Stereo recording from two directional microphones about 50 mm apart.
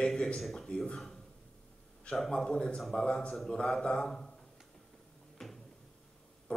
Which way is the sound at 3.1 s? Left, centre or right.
Centre.